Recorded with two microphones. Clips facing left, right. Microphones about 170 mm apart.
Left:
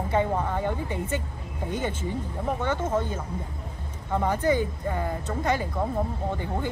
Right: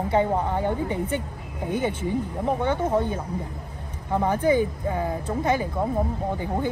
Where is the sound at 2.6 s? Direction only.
10° right (ahead or behind).